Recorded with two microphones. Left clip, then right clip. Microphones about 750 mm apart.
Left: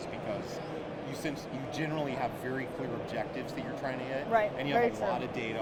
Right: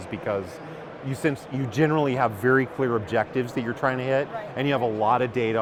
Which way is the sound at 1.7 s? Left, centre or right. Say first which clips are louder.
Right 13 dB; right.